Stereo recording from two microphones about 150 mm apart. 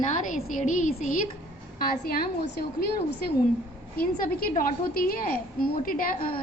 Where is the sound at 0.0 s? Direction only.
55° left (ahead or behind).